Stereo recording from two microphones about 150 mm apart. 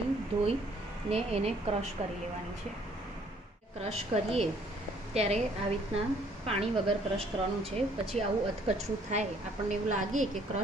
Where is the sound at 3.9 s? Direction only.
45° right (ahead or behind).